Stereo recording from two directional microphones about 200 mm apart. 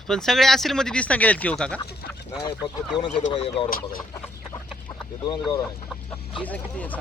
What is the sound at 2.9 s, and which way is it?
Speech, 20° left (ahead or behind).